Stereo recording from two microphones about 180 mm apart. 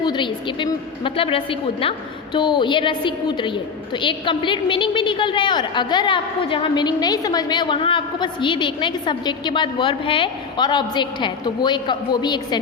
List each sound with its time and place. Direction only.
0.0 s a woman's voice: 25° left (ahead or behind)